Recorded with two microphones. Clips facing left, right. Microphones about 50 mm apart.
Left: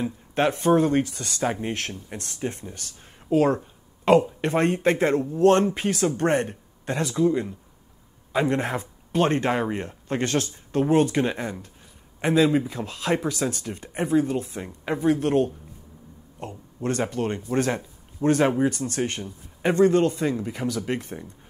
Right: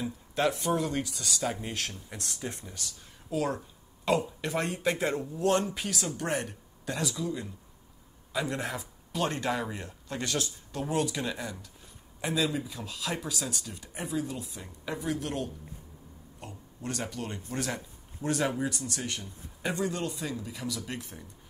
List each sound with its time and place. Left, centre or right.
0.0 s a man's voice: left